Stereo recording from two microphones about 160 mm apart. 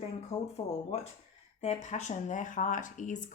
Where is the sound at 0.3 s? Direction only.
35° left (ahead or behind).